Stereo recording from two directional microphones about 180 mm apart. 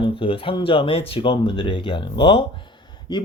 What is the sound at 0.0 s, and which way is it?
Speech, 30° left (ahead or behind).